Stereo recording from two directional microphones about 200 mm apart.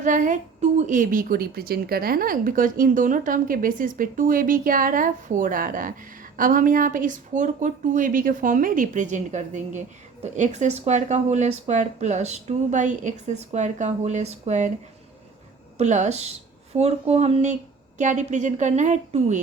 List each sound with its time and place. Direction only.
0.0 s a woman's voice: 40° right (ahead or behind)
15.8 s speech: 35° right (ahead or behind)